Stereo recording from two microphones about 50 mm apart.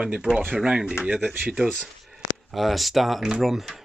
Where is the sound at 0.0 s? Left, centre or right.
Centre.